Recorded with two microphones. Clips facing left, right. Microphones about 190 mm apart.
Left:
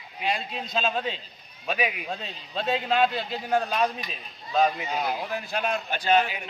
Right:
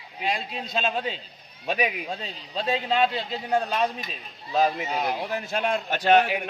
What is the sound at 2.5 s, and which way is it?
A man's voice, 5° left (ahead or behind).